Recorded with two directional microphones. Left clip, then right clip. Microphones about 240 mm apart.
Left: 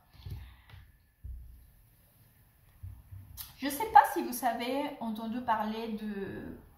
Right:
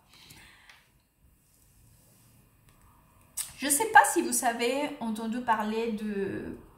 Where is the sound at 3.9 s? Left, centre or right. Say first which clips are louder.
Right 2 dB; right.